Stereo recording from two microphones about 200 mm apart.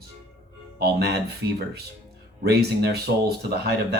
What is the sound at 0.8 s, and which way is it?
Speech, 55° right (ahead or behind).